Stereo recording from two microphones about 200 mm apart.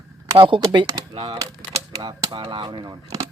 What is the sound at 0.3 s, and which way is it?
Speech, 25° right (ahead or behind).